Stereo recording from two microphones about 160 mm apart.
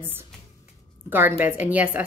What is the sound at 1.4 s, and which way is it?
Speech, 10° right (ahead or behind).